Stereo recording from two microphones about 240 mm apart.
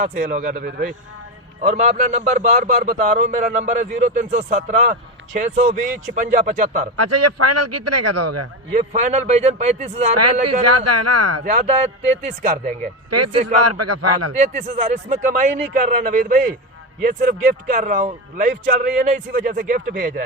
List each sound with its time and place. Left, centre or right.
0.0 s a man's voice: right
6.9 s a man's voice: right
8.7 s speech: right
10.6 s a man's voice: right
11.4 s a man's voice: right
13.1 s a man's voice: right
14.3 s a man's voice: right